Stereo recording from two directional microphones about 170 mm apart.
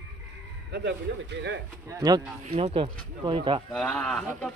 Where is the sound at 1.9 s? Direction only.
20° right (ahead or behind).